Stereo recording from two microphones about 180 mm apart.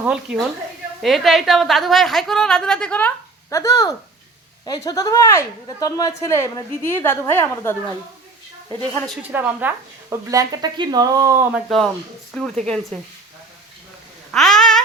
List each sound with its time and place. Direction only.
0.0 s a woman's voice: 5° right (ahead or behind)
3.5 s a woman's voice: 20° left (ahead or behind)
9.2 s speech: 10° right (ahead or behind)
12.3 s a woman's voice: centre (ahead or behind)
14.3 s a sound: centre (ahead or behind)